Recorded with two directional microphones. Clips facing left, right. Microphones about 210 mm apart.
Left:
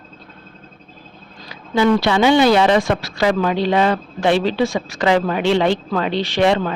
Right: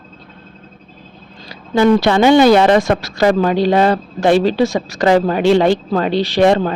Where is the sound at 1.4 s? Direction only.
45° right (ahead or behind).